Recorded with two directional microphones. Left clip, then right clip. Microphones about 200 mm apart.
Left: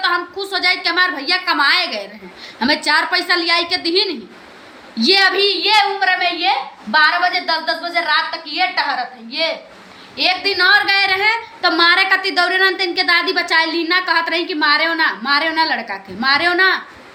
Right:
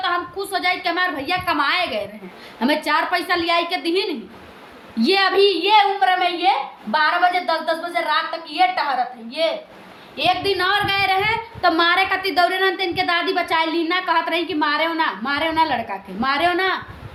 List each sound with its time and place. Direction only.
0.0 s a woman's voice: 15° right (ahead or behind)